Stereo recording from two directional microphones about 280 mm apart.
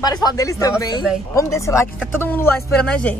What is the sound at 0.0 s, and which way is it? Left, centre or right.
Speech, centre.